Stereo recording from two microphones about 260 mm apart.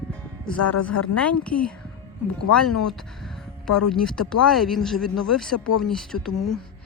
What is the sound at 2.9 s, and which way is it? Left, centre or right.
Speech, centre.